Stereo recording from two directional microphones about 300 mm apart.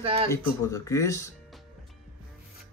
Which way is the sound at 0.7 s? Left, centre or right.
Centre.